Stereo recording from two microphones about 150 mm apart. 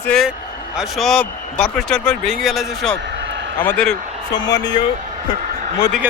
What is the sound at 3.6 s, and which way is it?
Speech, 10° left (ahead or behind).